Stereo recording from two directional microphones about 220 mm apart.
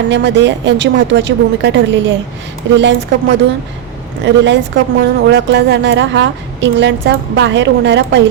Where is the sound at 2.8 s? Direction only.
55° right (ahead or behind).